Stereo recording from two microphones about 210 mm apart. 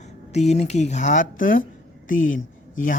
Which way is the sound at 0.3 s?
30° left (ahead or behind).